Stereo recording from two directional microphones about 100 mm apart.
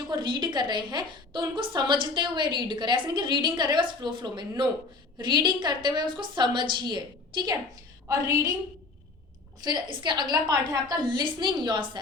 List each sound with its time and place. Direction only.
0.1 s a woman's voice: 50° right (ahead or behind)
9.6 s a woman's voice: 45° right (ahead or behind)